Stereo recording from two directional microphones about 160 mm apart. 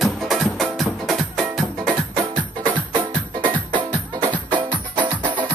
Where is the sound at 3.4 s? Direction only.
30° right (ahead or behind).